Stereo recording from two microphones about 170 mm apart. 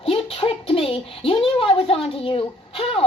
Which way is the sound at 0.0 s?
35° left (ahead or behind).